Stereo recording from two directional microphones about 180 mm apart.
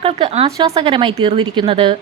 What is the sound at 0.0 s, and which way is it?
Speech, 35° right (ahead or behind).